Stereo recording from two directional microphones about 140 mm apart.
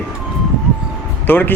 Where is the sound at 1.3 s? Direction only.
15° left (ahead or behind).